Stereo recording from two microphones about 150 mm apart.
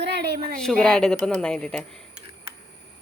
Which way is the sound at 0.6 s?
5° left (ahead or behind).